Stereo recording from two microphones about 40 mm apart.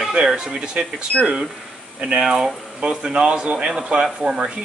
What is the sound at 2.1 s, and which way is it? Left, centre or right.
Speech, right.